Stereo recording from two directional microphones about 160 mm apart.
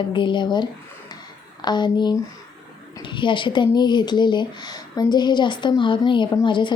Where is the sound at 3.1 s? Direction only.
30° left (ahead or behind).